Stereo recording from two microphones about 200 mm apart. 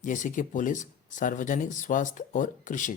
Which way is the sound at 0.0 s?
40° left (ahead or behind).